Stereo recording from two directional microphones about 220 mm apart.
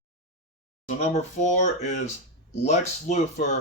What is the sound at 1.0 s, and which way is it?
Speech, 30° left (ahead or behind).